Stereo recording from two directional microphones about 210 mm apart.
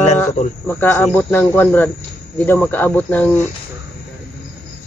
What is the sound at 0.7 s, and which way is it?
Speech, 10° left (ahead or behind).